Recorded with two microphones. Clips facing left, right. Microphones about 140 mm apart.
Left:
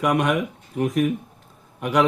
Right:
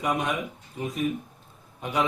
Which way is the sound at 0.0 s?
70° left (ahead or behind).